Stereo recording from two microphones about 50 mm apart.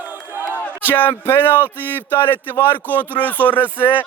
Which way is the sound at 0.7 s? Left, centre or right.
Right.